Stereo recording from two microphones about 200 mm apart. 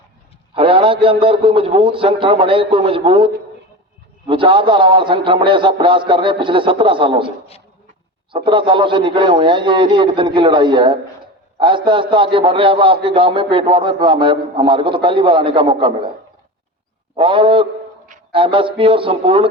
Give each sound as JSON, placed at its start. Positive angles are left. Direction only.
{"t": 0.5, "sound": "a man's voice", "side_deg": -25}
{"t": 17.2, "sound": "a man's voice", "side_deg": -25}